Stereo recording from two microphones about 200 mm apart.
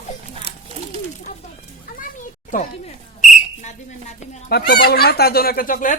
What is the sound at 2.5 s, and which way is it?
Speech, 40° left (ahead or behind).